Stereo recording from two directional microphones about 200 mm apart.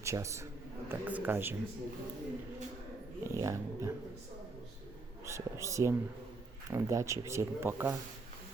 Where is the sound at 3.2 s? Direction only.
15° right (ahead or behind).